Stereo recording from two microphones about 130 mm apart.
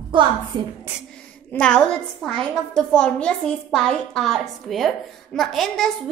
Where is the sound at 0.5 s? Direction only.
35° right (ahead or behind).